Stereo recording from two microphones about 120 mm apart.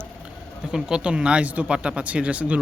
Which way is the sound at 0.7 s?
5° right (ahead or behind).